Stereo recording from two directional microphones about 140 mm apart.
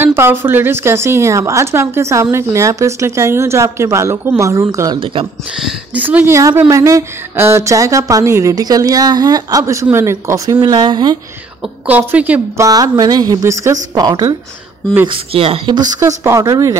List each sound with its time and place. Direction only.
0.0 s a woman's voice: 15° right (ahead or behind)
5.0 s speech: 40° right (ahead or behind)
5.6 s a woman's voice: 5° right (ahead or behind); by 11.1 s 30° right (ahead or behind)
12.0 s speech: 10° right (ahead or behind)
12.6 s a woman's voice: 25° right (ahead or behind)
15.0 s speech: 40° right (ahead or behind)
16.3 s a woman's voice: 25° right (ahead or behind)